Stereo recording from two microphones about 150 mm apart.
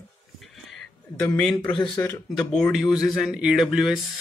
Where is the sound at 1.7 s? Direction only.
30° left (ahead or behind).